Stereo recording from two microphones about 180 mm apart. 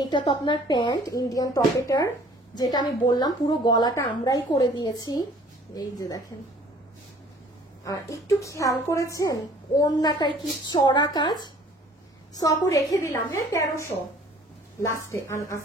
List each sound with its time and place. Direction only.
0.0 s a woman's voice: 25° left (ahead or behind)
7.8 s a woman's voice: 15° left (ahead or behind)
15.0 s a woman's voice: 15° left (ahead or behind)